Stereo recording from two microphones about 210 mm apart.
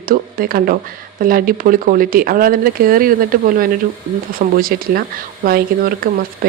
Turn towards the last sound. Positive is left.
turn(degrees=-45)  # may be behind; listen again after turning